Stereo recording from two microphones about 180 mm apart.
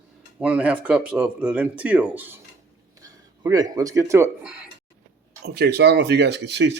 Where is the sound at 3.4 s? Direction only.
20° right (ahead or behind).